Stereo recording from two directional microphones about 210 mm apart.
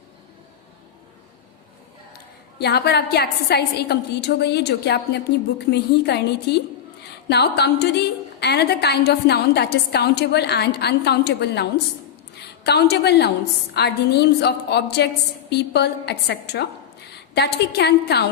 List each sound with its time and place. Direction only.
2.1 s a woman's voice: 50° left (ahead or behind)